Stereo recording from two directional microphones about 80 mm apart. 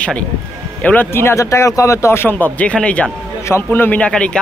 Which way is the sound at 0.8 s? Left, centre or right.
Left.